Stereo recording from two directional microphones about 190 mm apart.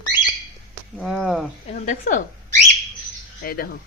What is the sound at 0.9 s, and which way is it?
Speech, centre (ahead or behind).